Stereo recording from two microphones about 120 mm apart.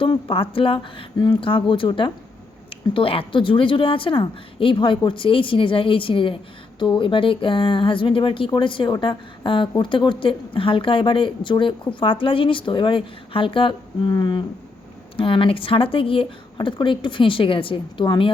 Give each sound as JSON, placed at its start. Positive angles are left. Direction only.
{"t": 0.0, "sound": "a woman's voice", "side_deg": 45}